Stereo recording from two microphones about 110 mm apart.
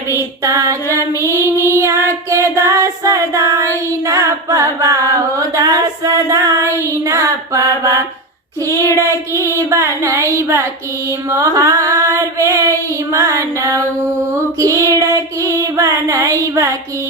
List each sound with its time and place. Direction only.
0.1 s child singing: 25° right (ahead or behind)
4.0 s carnatic music: 30° right (ahead or behind)
6.8 s child singing: 25° right (ahead or behind)
9.0 s a sound: 30° right (ahead or behind)
11.3 s child singing: 30° right (ahead or behind)
14.9 s female singing: 30° right (ahead or behind)